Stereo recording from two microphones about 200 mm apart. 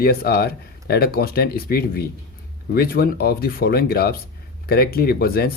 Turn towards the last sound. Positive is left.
turn(degrees=50)  # may be behind; listen again after turning